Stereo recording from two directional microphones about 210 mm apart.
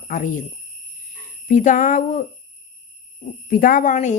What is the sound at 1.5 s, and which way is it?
Speech, 40° left (ahead or behind).